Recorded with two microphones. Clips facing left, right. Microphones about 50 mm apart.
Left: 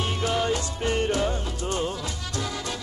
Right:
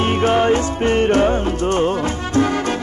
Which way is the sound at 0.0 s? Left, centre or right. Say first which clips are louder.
Right 10 dB; right.